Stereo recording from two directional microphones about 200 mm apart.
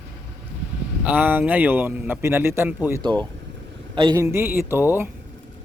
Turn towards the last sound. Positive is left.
turn(degrees=-10)  # may be behind; listen again after turning